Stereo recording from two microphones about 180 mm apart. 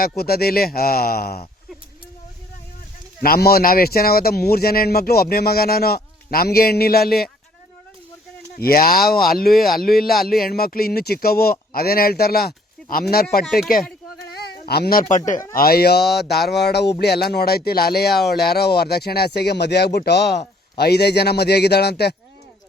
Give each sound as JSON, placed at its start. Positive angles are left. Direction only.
{"t": 0.2, "sound": "speech", "side_deg": 60}
{"t": 3.2, "sound": "speech", "side_deg": 60}
{"t": 8.5, "sound": "speech", "side_deg": 55}
{"t": 9.5, "sound": "speech", "side_deg": 0}
{"t": 10.2, "sound": "speech", "side_deg": 55}